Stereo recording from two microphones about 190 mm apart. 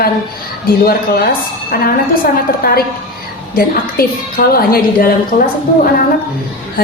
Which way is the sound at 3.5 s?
50° left (ahead or behind).